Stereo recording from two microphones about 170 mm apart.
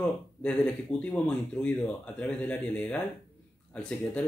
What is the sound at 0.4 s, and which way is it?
Speech, 5° left (ahead or behind).